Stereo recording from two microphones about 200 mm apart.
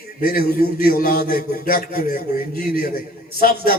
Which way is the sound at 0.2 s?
50° left (ahead or behind).